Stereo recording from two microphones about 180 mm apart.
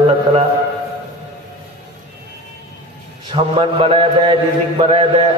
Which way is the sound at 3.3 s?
30° right (ahead or behind).